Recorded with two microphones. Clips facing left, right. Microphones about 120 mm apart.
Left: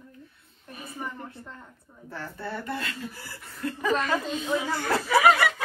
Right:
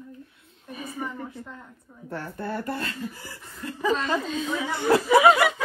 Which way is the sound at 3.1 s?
20° right (ahead or behind).